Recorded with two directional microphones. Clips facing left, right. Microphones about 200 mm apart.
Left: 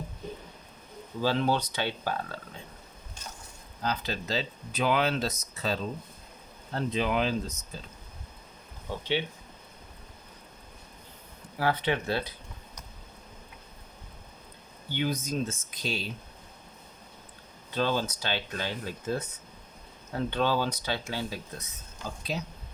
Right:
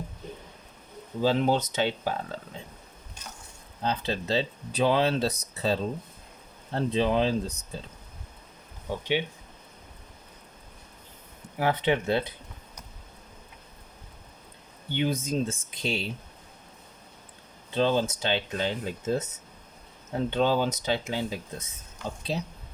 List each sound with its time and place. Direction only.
1.2 s speech: 20° right (ahead or behind)
3.8 s speech: 25° right (ahead or behind)
8.9 s speech: 15° right (ahead or behind)
11.5 s speech: 20° right (ahead or behind)
14.9 s speech: 25° right (ahead or behind)
17.7 s speech: 20° right (ahead or behind)